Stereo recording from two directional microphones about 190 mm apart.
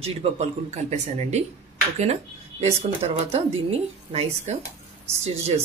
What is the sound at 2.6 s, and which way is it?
Speech, 35° right (ahead or behind).